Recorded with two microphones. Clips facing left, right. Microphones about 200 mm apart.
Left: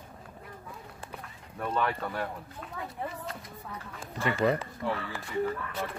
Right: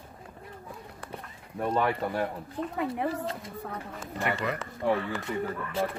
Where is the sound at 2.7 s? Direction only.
75° right (ahead or behind).